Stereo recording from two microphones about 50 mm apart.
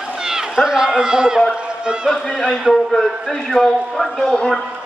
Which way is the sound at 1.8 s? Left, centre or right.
Centre.